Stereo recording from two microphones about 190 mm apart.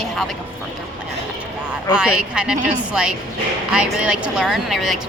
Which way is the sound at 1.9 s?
5° right (ahead or behind).